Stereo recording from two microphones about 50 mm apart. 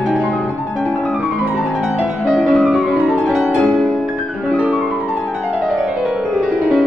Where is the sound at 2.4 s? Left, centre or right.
Centre.